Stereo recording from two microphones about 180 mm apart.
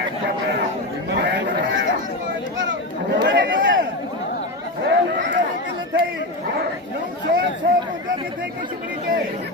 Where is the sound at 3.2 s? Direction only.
80° right.